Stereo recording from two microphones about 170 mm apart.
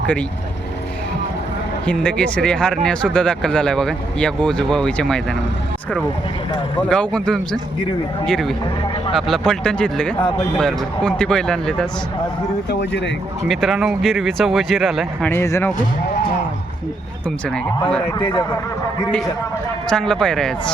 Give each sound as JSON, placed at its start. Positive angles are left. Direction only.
{"t": 1.9, "sound": "speech", "side_deg": 5}
{"t": 6.7, "sound": "speech", "side_deg": 5}
{"t": 12.8, "sound": "speech", "side_deg": 90}
{"t": 13.5, "sound": "speech", "side_deg": 0}
{"t": 15.3, "sound": "speech", "side_deg": 15}
{"t": 18.1, "sound": "a man's voice", "side_deg": 25}
{"t": 19.9, "sound": "speech", "side_deg": 5}